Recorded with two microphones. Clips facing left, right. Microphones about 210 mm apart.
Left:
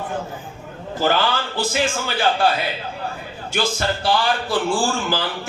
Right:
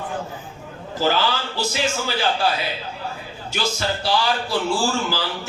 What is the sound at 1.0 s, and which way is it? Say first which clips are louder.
A man's voice: left 1 dB; 50° left (ahead or behind).